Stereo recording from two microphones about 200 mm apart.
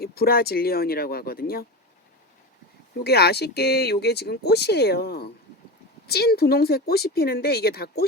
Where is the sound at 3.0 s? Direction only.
55° left (ahead or behind).